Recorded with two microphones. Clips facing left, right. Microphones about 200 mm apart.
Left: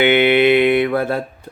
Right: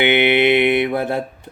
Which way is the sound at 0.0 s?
20° right (ahead or behind).